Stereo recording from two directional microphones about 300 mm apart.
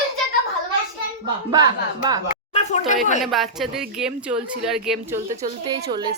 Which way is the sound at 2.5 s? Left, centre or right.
Left.